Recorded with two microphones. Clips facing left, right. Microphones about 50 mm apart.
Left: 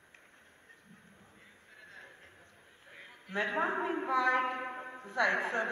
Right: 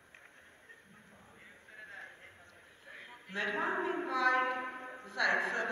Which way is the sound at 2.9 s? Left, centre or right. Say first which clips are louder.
Right 2 dB; centre.